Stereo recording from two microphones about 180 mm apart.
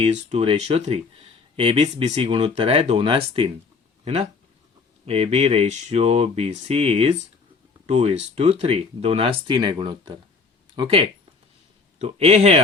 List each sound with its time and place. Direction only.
0.0 s speech: 40° right (ahead or behind)